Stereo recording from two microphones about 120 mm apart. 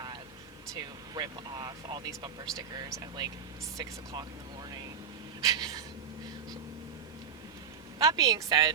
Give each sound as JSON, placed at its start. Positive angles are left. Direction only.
{"t": 0.7, "sound": "speech", "side_deg": -35}
{"t": 5.4, "sound": "a sound", "side_deg": -30}
{"t": 8.1, "sound": "speech", "side_deg": -30}